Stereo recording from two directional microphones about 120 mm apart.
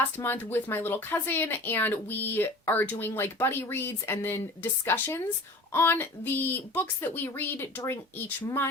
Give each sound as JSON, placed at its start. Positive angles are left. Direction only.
{"t": 0.2, "sound": "speech", "side_deg": 20}